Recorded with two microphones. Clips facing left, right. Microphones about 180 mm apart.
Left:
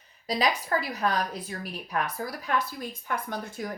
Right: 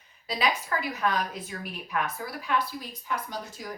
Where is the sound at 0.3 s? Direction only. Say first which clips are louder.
Left 2 dB; 35° left (ahead or behind).